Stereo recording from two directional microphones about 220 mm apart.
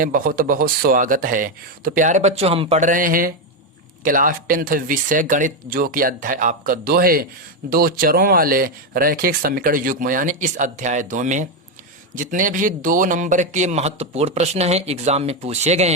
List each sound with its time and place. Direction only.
0.0 s a man's voice: 40° right (ahead or behind)